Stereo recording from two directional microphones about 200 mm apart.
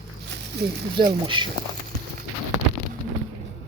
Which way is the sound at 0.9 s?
25° right (ahead or behind).